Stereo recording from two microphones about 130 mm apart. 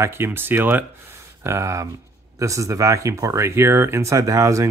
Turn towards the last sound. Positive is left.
turn(degrees=-25)  # may be behind; listen again after turning